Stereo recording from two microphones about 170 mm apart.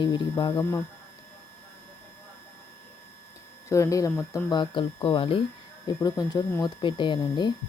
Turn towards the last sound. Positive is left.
turn(degrees=25)  # may be behind; listen again after turning